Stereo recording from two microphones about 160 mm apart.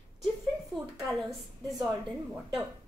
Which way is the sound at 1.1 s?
Centre (ahead or behind).